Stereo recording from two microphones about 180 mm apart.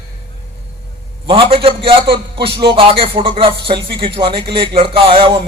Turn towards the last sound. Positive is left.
turn(degrees=-30)  # may be behind; listen again after turning